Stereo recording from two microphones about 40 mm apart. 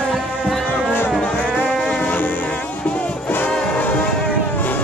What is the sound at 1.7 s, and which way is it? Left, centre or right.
Music, centre.